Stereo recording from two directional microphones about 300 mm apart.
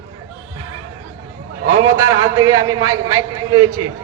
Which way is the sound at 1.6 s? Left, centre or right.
Right.